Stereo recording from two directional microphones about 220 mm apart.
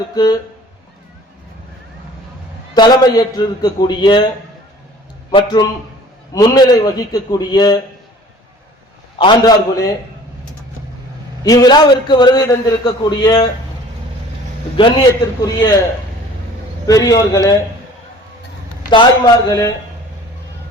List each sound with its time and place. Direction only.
0.1 s a man's voice: 20° left (ahead or behind)
2.7 s a man's voice: 20° left (ahead or behind)
5.3 s a man's voice: 20° left (ahead or behind)
9.1 s a man's voice: 20° left (ahead or behind)
11.4 s a man's voice: 15° left (ahead or behind)
14.8 s a man's voice: 20° left (ahead or behind)
16.8 s a man's voice: 15° left (ahead or behind)
18.9 s a man's voice: 20° left (ahead or behind)